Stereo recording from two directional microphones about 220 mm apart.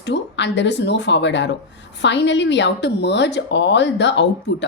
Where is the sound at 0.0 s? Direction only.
55° left (ahead or behind).